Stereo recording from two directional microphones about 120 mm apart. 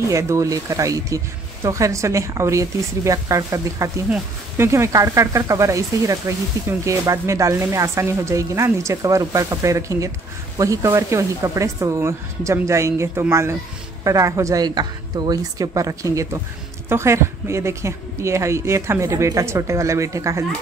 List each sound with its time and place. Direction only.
0.1 s speech: 25° right (ahead or behind)